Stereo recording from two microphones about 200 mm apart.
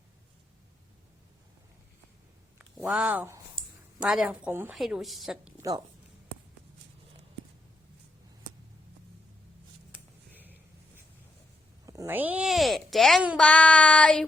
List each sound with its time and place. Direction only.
2.6 s speech: centre (ahead or behind)
5.5 s speech: 15° right (ahead or behind)
10.3 s a sound: 10° right (ahead or behind)
11.9 s a child's voice: 15° right (ahead or behind); by 14.3 s 5° left (ahead or behind)